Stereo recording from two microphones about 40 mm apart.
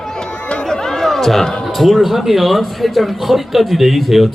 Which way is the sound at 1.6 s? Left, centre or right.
Centre.